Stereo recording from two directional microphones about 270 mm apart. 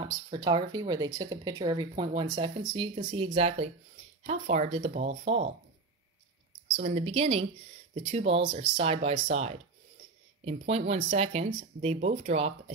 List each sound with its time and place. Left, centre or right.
0.0 s speech: centre
6.8 s speech: right